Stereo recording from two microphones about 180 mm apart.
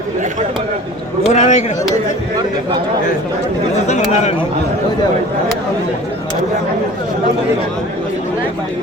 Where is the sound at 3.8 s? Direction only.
40° left (ahead or behind).